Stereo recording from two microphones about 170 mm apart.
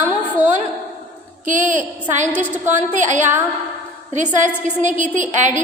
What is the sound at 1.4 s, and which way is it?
A woman's voice, 45° right (ahead or behind).